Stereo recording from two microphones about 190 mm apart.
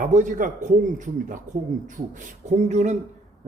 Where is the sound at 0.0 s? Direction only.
40° right (ahead or behind).